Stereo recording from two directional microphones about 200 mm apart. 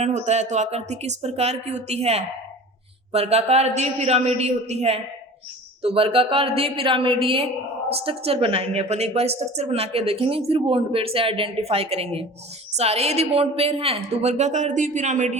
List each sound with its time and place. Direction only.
0.0 s a woman's voice: 35° right (ahead or behind)